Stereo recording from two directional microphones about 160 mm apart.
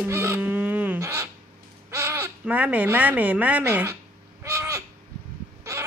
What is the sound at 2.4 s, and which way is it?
Speech, 10° right (ahead or behind).